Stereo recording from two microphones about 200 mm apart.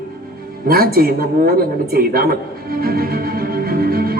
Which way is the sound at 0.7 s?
50° right (ahead or behind).